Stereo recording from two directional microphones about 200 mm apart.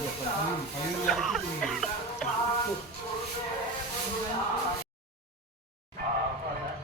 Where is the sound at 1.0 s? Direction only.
Centre (ahead or behind).